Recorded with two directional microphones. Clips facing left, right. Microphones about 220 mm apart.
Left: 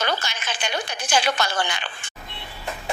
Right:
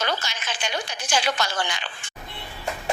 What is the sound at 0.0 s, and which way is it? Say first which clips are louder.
A woman's voice: left 2 dB; 60° left (ahead or behind).